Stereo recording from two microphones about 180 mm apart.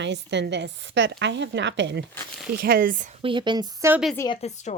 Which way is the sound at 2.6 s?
55° right (ahead or behind).